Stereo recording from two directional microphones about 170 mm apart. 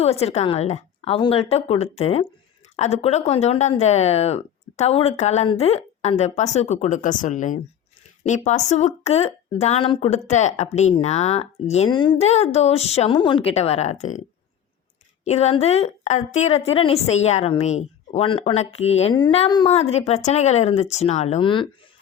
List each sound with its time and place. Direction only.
0.0 s a woman's voice: 40° left (ahead or behind)
11.9 s a woman's voice: 25° left (ahead or behind)
15.2 s a woman's voice: 40° left (ahead or behind)
19.1 s speech: 25° left (ahead or behind)
19.6 s a woman's voice: 40° left (ahead or behind)